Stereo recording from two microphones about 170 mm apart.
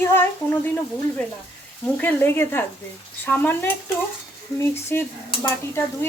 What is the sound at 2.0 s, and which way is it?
Stir, 10° left (ahead or behind).